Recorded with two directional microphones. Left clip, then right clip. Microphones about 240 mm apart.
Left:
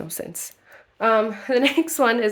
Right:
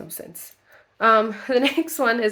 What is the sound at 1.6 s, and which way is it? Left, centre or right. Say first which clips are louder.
Speech: left 3 dB; centre.